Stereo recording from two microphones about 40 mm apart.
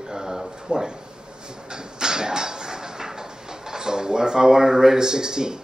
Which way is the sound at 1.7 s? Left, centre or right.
Centre.